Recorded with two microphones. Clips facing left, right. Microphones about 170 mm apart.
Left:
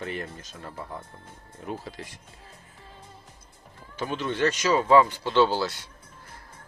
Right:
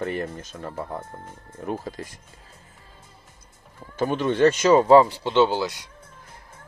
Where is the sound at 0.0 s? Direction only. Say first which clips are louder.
Right 6 dB; 55° right (ahead or behind).